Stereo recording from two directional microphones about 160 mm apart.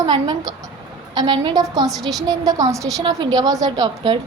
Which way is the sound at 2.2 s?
25° right (ahead or behind).